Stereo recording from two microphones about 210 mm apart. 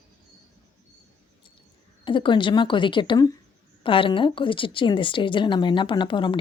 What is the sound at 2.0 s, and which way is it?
Speech, 25° left (ahead or behind).